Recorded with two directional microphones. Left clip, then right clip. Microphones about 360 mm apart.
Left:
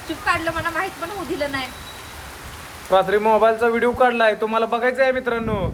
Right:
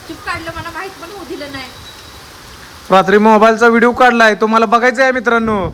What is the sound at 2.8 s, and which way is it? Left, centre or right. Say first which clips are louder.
A man's voice: right 8 dB; right.